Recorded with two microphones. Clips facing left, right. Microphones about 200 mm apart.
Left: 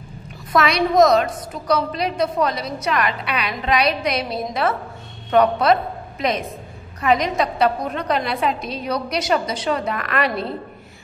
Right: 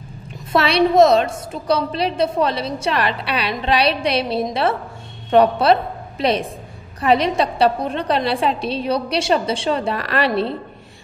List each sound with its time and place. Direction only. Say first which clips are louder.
0.5 s a woman's voice: right 3 dB; 30° right (ahead or behind)